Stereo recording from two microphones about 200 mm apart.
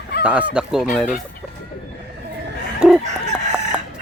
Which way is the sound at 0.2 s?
5° right (ahead or behind).